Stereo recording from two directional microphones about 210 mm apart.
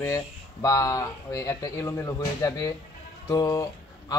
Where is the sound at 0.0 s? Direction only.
15° left (ahead or behind).